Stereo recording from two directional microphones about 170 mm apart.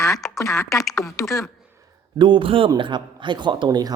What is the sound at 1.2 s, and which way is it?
Speech, centre (ahead or behind).